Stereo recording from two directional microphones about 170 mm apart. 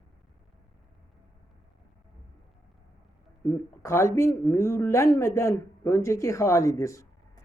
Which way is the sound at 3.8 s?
15° left (ahead or behind).